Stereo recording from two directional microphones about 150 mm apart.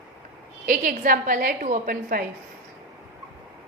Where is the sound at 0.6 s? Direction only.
60° right (ahead or behind).